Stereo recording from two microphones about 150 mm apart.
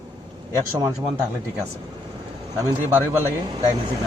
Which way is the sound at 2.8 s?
15° right (ahead or behind).